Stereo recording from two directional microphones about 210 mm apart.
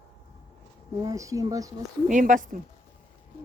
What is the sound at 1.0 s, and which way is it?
Speech, 15° right (ahead or behind).